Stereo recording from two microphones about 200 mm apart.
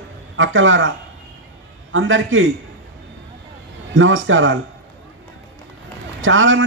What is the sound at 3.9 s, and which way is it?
Speech, 75° right (ahead or behind).